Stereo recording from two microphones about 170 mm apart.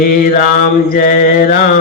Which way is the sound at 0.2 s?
55° left (ahead or behind).